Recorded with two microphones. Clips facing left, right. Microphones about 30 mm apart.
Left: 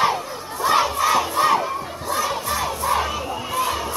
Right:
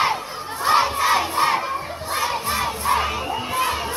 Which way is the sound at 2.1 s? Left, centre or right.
Right.